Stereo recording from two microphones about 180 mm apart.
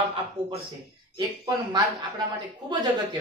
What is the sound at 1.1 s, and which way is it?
Speech, 25° right (ahead or behind).